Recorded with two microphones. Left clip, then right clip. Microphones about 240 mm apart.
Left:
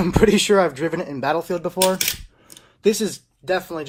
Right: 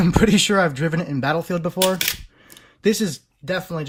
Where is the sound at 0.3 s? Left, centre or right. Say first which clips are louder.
Left 3 dB; right.